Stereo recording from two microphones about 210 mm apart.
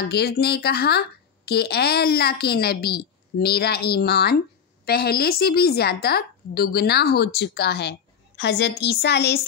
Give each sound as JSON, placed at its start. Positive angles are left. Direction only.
{"t": 0.1, "sound": "speech", "side_deg": 50}